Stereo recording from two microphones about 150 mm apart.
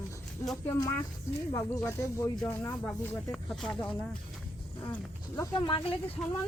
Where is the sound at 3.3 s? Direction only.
5° left (ahead or behind).